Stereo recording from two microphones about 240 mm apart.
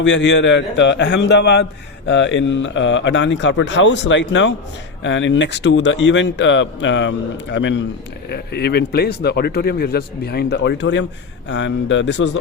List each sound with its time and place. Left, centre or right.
0.0 s a man's voice: left